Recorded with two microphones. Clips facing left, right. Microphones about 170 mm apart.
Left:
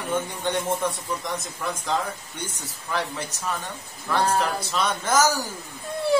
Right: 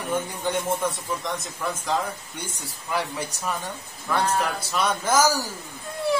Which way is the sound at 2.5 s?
10° right (ahead or behind).